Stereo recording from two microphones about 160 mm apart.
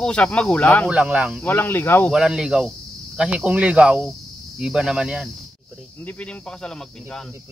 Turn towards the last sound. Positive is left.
turn(degrees=10)  # may be behind; listen again after turning